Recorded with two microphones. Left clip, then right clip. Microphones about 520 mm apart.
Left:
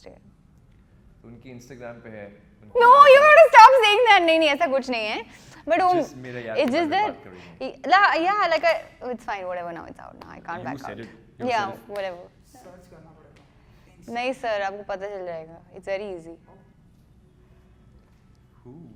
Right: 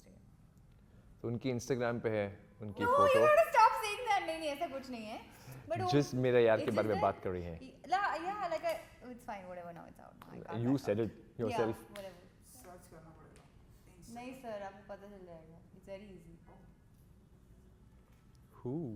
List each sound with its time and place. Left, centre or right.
1.2 s a man's voice: right
2.7 s a woman's voice: left
5.9 s speech: right
6.6 s a woman's voice: left
10.8 s speech: right
11.0 s a woman's voice: left
14.1 s a woman's voice: left
18.6 s speech: right